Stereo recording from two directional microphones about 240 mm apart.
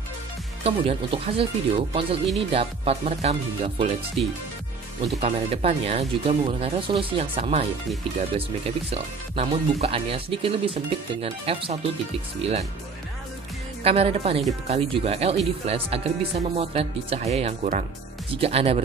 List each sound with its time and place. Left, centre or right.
0.7 s speech: right
13.8 s speech: right